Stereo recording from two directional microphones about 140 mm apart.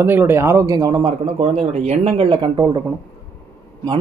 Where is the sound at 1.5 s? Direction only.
50° right (ahead or behind).